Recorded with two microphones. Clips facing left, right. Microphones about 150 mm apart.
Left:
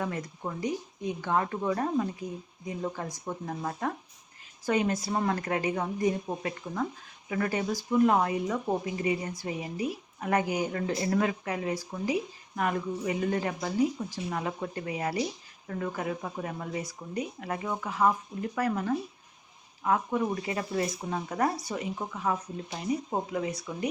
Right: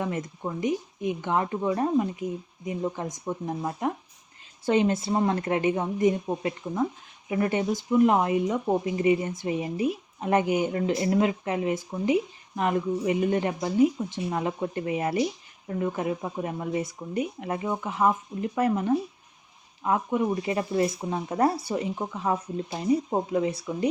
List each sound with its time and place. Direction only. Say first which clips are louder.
0.0 s speech: right 3 dB; 20° right (ahead or behind)